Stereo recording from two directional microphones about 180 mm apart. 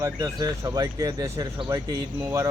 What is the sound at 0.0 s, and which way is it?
Speech, 20° right (ahead or behind).